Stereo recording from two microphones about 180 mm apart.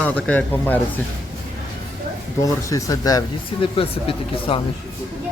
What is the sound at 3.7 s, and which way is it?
Speech, 30° left (ahead or behind).